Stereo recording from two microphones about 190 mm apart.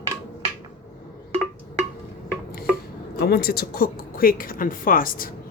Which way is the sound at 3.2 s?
55° left (ahead or behind).